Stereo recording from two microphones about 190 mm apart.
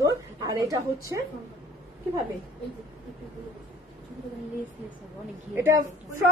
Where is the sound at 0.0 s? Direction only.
20° right (ahead or behind).